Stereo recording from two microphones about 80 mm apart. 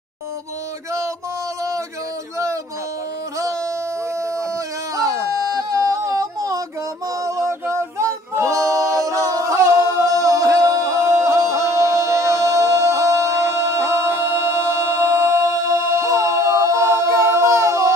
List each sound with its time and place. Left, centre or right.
4.9 s a sound: right
7.2 s singing: right
14.8 s a capella: right